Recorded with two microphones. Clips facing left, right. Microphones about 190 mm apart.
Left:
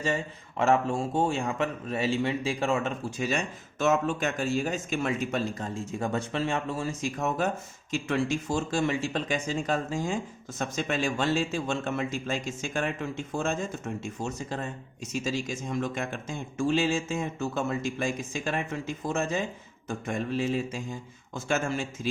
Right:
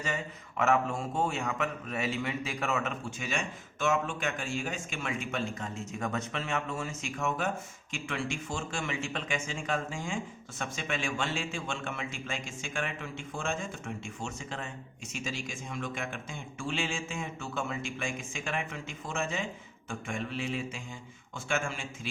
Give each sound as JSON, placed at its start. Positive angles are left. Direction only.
{"t": 0.0, "sound": "a man's voice", "side_deg": 30}